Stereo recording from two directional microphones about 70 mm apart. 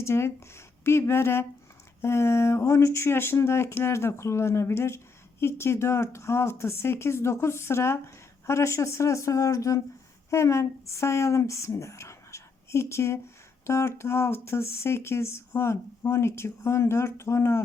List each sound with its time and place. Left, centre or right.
0.0 s speech: left